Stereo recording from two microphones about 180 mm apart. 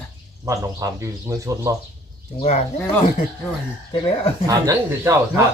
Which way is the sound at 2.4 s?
40° left (ahead or behind).